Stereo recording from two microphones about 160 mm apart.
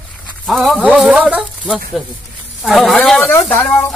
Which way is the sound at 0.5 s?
Centre (ahead or behind).